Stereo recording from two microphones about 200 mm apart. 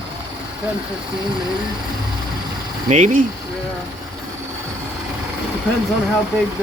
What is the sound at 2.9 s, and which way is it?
Speech, 35° right (ahead or behind).